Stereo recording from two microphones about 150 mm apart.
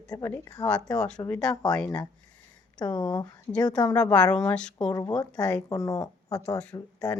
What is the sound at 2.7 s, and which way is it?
Speech, 30° left (ahead or behind).